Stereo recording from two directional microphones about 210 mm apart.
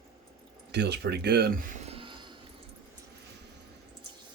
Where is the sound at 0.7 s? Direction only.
55° right (ahead or behind); by 2.4 s 20° right (ahead or behind).